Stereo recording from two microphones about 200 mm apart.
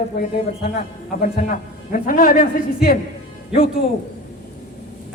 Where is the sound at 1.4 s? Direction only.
40° left (ahead or behind).